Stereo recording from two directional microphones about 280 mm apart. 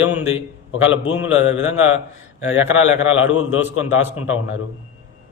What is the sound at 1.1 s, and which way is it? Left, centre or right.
Speech, centre.